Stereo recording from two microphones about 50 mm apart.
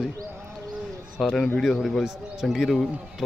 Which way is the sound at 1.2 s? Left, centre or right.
Centre.